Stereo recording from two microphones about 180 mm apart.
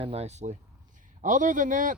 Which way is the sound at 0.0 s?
35° right (ahead or behind).